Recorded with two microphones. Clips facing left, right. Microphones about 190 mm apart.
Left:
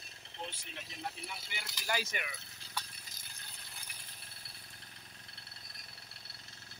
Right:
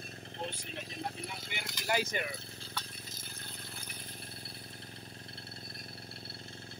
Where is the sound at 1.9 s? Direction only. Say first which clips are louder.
Right 5 dB; 30° right (ahead or behind).